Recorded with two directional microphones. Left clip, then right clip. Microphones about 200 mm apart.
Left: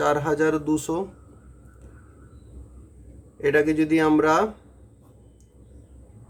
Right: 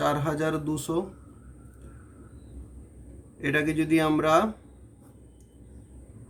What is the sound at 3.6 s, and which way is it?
Speech, 35° left (ahead or behind).